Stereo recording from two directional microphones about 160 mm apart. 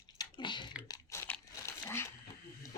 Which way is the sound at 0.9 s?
15° left (ahead or behind).